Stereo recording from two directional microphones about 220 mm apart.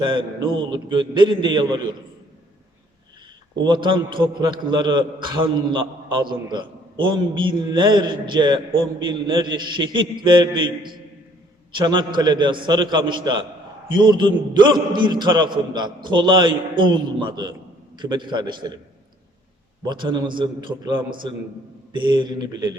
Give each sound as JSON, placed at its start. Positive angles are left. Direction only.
{"t": 0.0, "sound": "a man's voice", "side_deg": -20}
{"t": 3.6, "sound": "a man's voice", "side_deg": -20}
{"t": 7.4, "sound": "a man's voice", "side_deg": -20}
{"t": 11.8, "sound": "a man's voice", "side_deg": -20}
{"t": 19.8, "sound": "a man's voice", "side_deg": -20}
{"t": 21.9, "sound": "a man's voice", "side_deg": -20}